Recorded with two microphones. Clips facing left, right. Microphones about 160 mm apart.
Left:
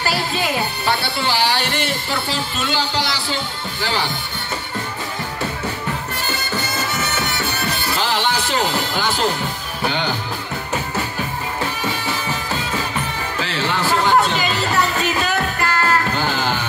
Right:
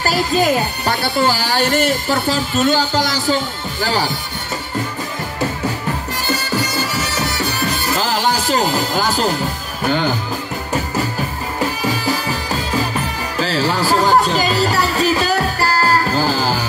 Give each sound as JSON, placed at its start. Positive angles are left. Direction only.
{"t": 0.0, "sound": "speech", "side_deg": -40}
{"t": 7.2, "sound": "music", "side_deg": -35}
{"t": 9.8, "sound": "speech", "side_deg": -45}
{"t": 11.8, "sound": "music", "side_deg": -40}